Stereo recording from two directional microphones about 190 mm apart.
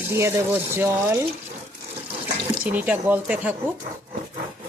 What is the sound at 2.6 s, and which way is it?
Speech, 10° right (ahead or behind).